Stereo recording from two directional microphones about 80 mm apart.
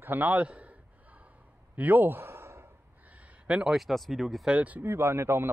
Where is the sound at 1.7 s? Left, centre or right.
Right.